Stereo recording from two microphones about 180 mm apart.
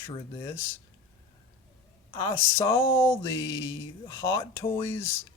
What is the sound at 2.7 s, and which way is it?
Speech, 15° left (ahead or behind).